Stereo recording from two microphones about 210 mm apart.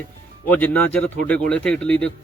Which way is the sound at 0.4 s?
5° left (ahead or behind).